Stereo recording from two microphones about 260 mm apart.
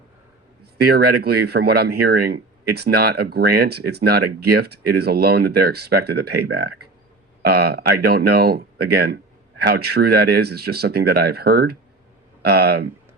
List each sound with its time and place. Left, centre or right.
0.6 s speech: right